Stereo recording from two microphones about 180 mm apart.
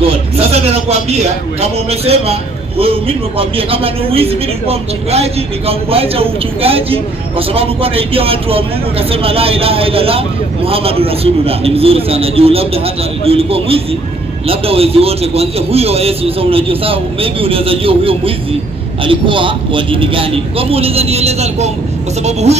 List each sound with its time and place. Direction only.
0.1 s a man's voice: 35° right (ahead or behind)